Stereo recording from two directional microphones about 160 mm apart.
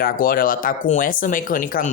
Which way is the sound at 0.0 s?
65° left (ahead or behind).